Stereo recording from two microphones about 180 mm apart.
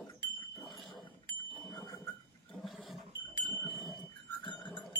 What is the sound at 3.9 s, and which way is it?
Goat, centre (ahead or behind).